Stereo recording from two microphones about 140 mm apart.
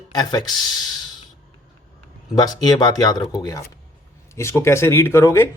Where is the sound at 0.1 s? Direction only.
30° left (ahead or behind).